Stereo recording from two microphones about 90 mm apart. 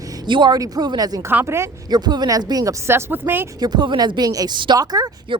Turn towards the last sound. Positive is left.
turn(degrees=-45)  # may be behind; listen again after turning